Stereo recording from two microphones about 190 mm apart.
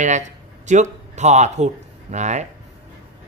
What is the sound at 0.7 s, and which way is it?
Speech, 40° right (ahead or behind).